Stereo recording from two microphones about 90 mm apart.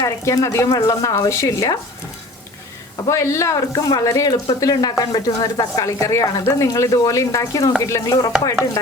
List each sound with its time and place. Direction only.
0.0 s speech: 35° left (ahead or behind)
3.1 s speech: 35° left (ahead or behind)